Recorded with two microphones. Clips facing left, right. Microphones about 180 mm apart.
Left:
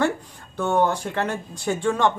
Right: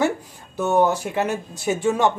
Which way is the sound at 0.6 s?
5° right (ahead or behind).